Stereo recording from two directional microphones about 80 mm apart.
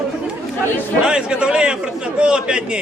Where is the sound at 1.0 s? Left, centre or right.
Centre.